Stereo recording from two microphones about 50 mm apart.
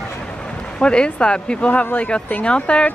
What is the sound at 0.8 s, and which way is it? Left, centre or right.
Speech, centre.